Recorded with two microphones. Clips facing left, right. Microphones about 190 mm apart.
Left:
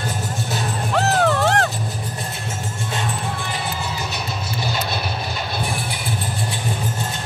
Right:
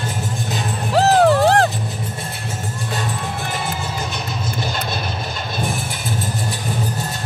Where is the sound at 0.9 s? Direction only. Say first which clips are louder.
Right 6 dB; 35° right (ahead or behind).